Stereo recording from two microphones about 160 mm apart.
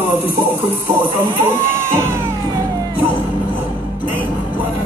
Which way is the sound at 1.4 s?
15° right (ahead or behind).